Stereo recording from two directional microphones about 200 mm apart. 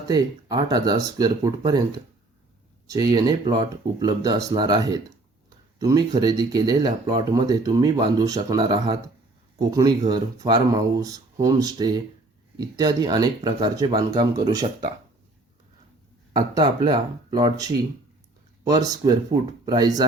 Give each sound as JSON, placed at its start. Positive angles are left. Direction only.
{"t": 0.1, "sound": "speech", "side_deg": -20}
{"t": 2.8, "sound": "speech", "side_deg": -20}
{"t": 16.3, "sound": "speech", "side_deg": -25}